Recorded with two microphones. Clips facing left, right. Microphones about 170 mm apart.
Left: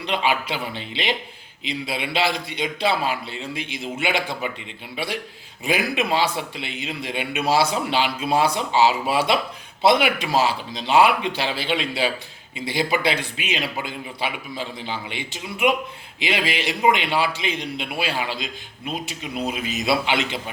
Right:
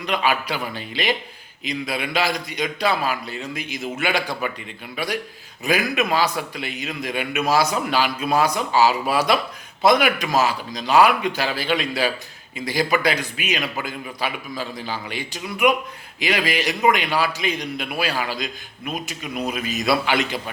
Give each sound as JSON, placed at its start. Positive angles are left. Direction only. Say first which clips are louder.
{"t": 0.0, "sound": "a man's voice", "louder": "right 1 dB", "side_deg": 25}